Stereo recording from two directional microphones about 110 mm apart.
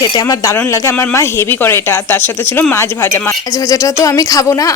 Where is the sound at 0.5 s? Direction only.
25° left (ahead or behind).